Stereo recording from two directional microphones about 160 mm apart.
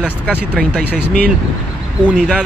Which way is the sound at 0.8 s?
85° right.